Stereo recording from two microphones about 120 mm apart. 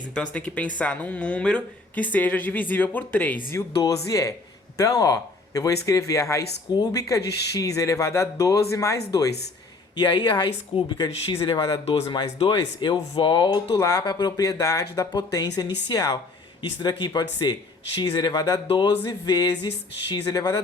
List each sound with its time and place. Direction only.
0.1 s speech: 10° left (ahead or behind)
3.8 s speech: 25° left (ahead or behind)
9.9 s speech: 40° left (ahead or behind)